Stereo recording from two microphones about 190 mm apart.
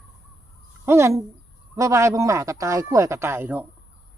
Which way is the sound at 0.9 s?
15° right (ahead or behind).